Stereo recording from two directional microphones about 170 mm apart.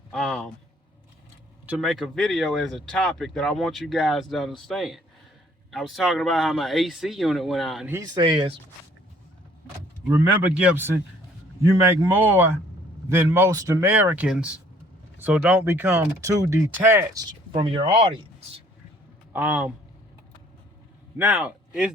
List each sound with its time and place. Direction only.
0.1 s speech: centre (ahead or behind)
1.6 s speech: centre (ahead or behind)
8.1 s speech: 30° right (ahead or behind)
10.1 s speech: 10° right (ahead or behind)
12.1 s speech: 10° right (ahead or behind)
17.5 s speech: 30° right (ahead or behind)
19.3 s a man's voice: 10° right (ahead or behind)
21.2 s speech: 10° right (ahead or behind)